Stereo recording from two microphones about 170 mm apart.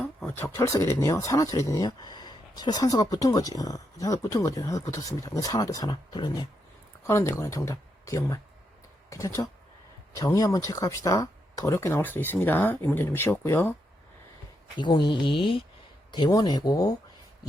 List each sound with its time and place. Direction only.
0.0 s a sound: centre (ahead or behind)
0.3 s speech: 15° left (ahead or behind)
14.8 s speech: 25° left (ahead or behind)